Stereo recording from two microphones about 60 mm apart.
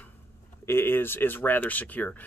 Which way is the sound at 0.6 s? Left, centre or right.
Left.